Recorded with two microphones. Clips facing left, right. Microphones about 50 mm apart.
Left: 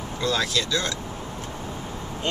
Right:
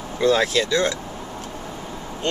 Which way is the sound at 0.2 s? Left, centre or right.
Right.